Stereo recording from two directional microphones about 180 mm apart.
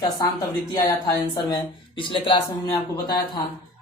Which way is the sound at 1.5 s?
30° left (ahead or behind).